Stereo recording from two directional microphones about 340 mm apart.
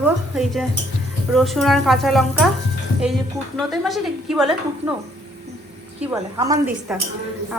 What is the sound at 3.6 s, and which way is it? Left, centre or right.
Speech, centre.